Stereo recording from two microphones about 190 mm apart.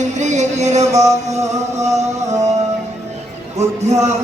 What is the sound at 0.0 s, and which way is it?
Music, 40° right (ahead or behind).